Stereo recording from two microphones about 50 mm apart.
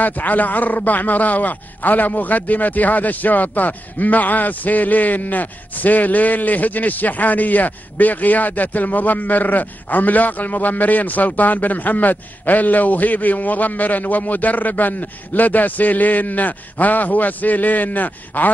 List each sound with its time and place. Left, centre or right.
0.0 s speech: left